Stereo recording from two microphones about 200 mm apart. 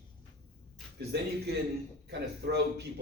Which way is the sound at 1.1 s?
55° right (ahead or behind).